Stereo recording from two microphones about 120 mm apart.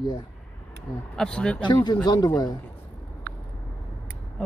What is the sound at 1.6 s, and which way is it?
Speech, 40° left (ahead or behind).